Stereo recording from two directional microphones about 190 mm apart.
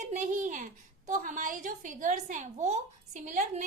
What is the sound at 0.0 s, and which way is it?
A woman's voice, 40° right (ahead or behind).